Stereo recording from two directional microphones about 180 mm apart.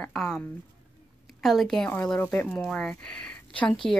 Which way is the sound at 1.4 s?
Centre (ahead or behind).